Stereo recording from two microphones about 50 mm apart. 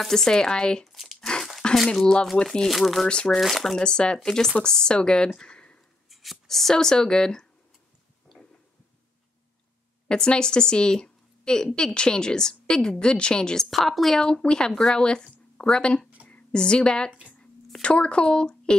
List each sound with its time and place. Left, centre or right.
0.0 s a woman's voice: centre
1.2 s a sound: centre
2.0 s a woman's voice: centre
2.7 s speech: centre
3.8 s a woman's voice: centre
5.3 s a sound: centre
6.0 s speech: centre
10.0 s a woman's voice: centre
13.7 s speech: centre
14.1 s a woman's voice: centre